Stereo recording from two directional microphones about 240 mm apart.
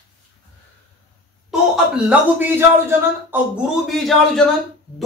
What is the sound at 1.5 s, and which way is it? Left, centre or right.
Speech, centre.